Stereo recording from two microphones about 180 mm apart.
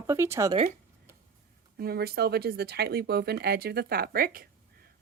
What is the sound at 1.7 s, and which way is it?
Speech, 60° right (ahead or behind).